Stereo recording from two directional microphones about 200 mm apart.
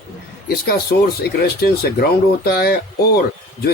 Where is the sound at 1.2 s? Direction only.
50° left (ahead or behind).